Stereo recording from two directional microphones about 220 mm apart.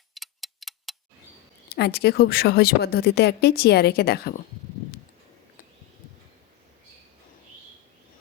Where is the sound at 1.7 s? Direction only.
50° left (ahead or behind).